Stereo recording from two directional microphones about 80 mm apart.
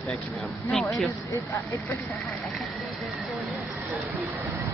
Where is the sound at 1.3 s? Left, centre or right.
Left.